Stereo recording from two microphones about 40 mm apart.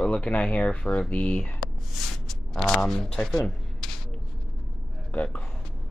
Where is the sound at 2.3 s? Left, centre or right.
Centre.